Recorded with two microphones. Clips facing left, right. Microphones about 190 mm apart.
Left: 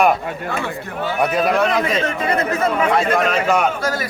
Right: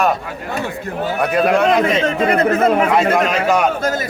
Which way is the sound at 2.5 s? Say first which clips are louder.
Right 5 dB; 55° right (ahead or behind).